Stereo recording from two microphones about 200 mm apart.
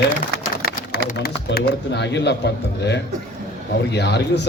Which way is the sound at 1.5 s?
60° left (ahead or behind).